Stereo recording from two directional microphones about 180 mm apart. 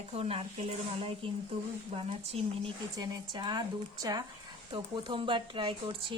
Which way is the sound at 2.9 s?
20° right (ahead or behind).